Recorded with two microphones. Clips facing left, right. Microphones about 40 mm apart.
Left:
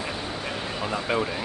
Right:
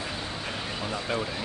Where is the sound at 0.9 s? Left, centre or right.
Centre.